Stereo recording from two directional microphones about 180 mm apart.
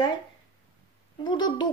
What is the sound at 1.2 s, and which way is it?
Speech, 25° left (ahead or behind).